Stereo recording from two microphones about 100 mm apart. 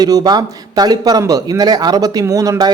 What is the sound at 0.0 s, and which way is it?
Speech, 40° right (ahead or behind).